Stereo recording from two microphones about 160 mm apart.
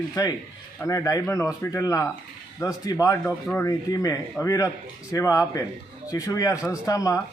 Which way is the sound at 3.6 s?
20° left (ahead or behind).